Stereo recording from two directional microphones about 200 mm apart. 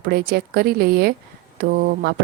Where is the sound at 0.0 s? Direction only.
50° right (ahead or behind).